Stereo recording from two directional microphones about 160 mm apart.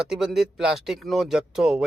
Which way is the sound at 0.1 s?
Centre (ahead or behind).